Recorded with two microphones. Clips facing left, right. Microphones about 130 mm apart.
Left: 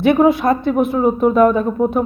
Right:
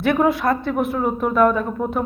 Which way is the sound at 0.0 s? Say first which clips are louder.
Left 5 dB; 20° left (ahead or behind).